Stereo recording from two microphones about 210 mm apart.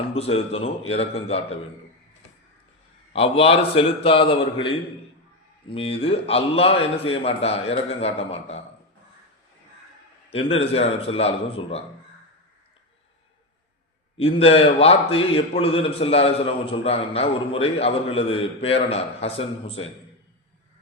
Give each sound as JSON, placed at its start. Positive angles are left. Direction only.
{"t": 0.1, "sound": "a man's voice", "side_deg": 30}
{"t": 3.1, "sound": "a man's voice", "side_deg": 25}
{"t": 10.2, "sound": "a man's voice", "side_deg": 30}
{"t": 14.2, "sound": "a man's voice", "side_deg": 25}